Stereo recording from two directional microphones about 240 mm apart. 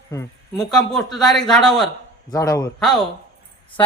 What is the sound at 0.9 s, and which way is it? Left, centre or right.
Speech, centre.